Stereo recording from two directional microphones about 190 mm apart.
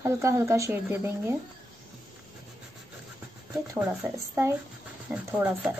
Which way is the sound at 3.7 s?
10° right (ahead or behind).